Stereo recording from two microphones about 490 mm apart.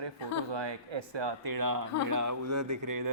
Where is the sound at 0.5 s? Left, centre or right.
Right.